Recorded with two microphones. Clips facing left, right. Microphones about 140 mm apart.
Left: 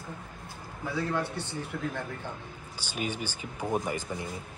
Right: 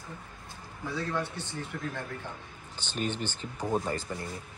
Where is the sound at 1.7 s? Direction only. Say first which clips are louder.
Left 3 dB; 10° left (ahead or behind).